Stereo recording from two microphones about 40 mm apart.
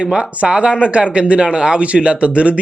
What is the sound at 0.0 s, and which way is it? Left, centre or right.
A man's voice, right.